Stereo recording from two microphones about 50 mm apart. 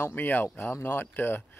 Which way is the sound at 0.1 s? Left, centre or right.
Left.